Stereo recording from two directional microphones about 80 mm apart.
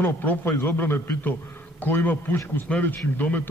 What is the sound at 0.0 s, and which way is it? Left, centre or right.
A man's voice, left.